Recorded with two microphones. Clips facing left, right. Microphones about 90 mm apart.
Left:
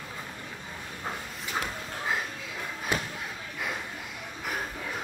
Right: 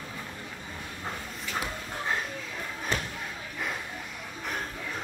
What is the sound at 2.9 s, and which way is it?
Slam, 10° left (ahead or behind).